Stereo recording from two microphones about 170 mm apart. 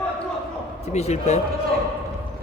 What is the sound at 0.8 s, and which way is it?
Speech, 40° left (ahead or behind).